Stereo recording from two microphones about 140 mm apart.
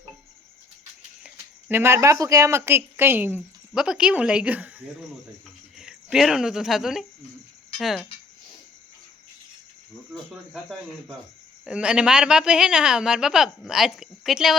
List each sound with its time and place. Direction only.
1.2 s a sound: 5° right (ahead or behind)
1.8 s speech: 20° right (ahead or behind)
5.8 s a woman's voice: 5° right (ahead or behind)
10.1 s a woman's voice: centre (ahead or behind)